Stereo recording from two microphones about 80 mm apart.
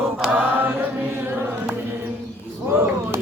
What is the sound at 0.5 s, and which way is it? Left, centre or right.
Chant, right.